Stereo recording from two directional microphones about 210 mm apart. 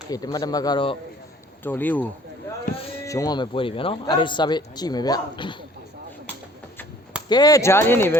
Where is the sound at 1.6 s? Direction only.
10° left (ahead or behind).